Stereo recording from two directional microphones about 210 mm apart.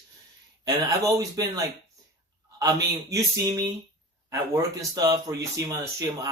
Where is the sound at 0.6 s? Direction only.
20° right (ahead or behind).